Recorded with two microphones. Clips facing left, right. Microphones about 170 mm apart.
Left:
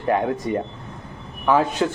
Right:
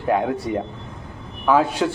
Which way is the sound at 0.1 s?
5° right (ahead or behind).